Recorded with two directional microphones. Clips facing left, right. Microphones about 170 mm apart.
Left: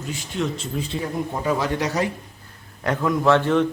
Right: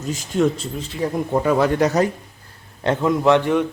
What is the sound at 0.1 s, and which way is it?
Speech, 40° right (ahead or behind).